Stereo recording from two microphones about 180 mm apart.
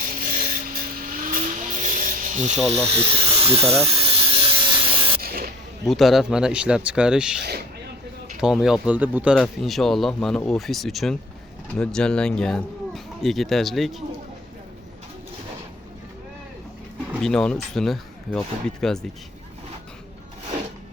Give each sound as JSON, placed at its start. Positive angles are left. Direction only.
{"t": 0.0, "sound": "vehicle", "side_deg": -50}
{"t": 2.6, "sound": "speech", "side_deg": 0}
{"t": 2.9, "sound": "speech", "side_deg": -30}
{"t": 3.9, "sound": "a sound", "side_deg": -30}
{"t": 5.2, "sound": "spray", "side_deg": -55}
{"t": 5.8, "sound": "speech", "side_deg": 0}
{"t": 17.1, "sound": "speech", "side_deg": 0}